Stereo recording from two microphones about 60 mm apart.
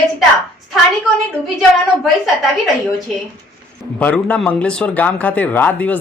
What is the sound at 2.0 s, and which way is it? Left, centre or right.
Speech, centre.